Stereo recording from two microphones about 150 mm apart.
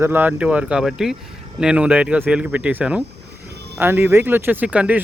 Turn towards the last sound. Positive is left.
turn(degrees=-10)  # may be behind; listen again after turning